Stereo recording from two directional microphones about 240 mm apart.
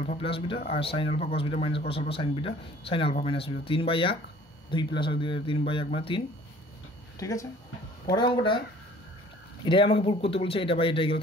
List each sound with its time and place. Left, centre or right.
0.0 s speech: left
9.7 s speech: left